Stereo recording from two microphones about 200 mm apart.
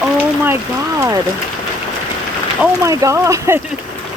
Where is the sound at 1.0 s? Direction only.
15° right (ahead or behind).